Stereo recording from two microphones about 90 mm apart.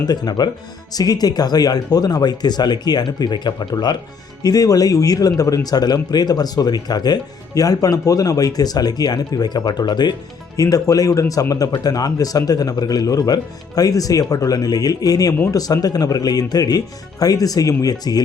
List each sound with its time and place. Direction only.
0.0 s a man's voice: 50° left (ahead or behind)
4.4 s a man's voice: 40° left (ahead or behind)
10.6 s a man's voice: 40° left (ahead or behind)